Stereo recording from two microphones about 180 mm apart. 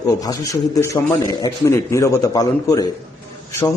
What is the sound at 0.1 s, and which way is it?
A man's voice, 20° left (ahead or behind).